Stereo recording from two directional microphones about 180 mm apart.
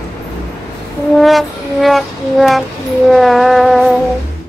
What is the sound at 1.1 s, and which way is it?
Music, centre (ahead or behind).